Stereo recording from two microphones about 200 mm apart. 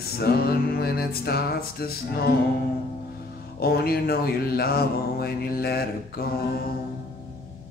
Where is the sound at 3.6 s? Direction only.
50° left (ahead or behind).